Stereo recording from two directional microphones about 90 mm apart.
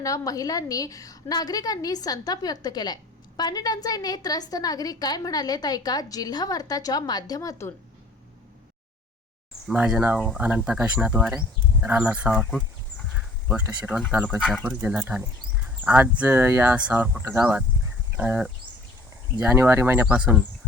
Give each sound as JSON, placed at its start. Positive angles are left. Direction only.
{"t": 0.0, "sound": "a woman's voice", "side_deg": 40}
{"t": 9.6, "sound": "speech", "side_deg": -5}
{"t": 10.0, "sound": "speech", "side_deg": -15}
{"t": 13.1, "sound": "a sound", "side_deg": -15}
{"t": 14.3, "sound": "speech", "side_deg": -5}
{"t": 16.7, "sound": "speech", "side_deg": -10}